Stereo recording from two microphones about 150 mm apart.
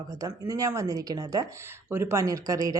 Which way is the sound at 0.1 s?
20° right (ahead or behind).